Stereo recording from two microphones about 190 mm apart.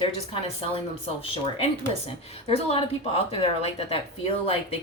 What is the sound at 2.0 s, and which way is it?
Speech, 30° left (ahead or behind).